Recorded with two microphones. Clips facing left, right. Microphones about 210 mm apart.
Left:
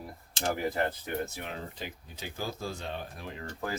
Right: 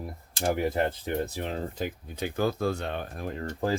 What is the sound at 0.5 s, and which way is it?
Speech, 25° right (ahead or behind).